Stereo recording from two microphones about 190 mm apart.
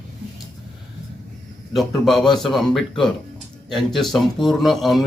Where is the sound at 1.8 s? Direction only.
Centre (ahead or behind).